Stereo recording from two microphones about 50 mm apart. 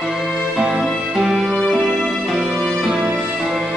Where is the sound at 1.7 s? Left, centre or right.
Centre.